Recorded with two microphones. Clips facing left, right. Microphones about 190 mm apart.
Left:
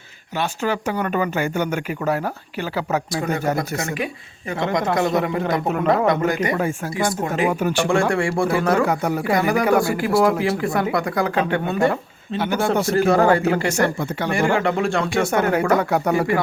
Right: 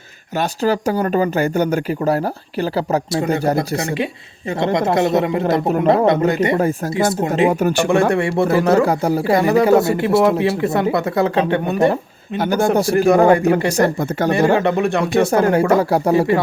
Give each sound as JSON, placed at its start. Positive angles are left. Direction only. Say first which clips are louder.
{"t": 0.3, "sound": "speech", "louder": "right 5 dB", "side_deg": -40}
{"t": 3.1, "sound": "speech", "louder": "right 5 dB", "side_deg": -25}
{"t": 6.6, "sound": "speech", "louder": "right 5 dB", "side_deg": -40}
{"t": 6.9, "sound": "speech", "louder": "right 4 dB", "side_deg": -25}
{"t": 7.5, "sound": "speech", "louder": "right 4 dB", "side_deg": -45}
{"t": 8.1, "sound": "speech", "louder": "right 4 dB", "side_deg": -20}
{"t": 12.4, "sound": "speech", "louder": "right 4 dB", "side_deg": -40}
{"t": 13.1, "sound": "speech", "louder": "right 5 dB", "side_deg": -20}
{"t": 14.0, "sound": "speech", "louder": "right 5 dB", "side_deg": -45}
{"t": 14.5, "sound": "speech", "louder": "right 4 dB", "side_deg": -20}